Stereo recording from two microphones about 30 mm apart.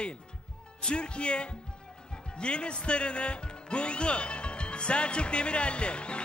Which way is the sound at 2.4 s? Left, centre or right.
Left.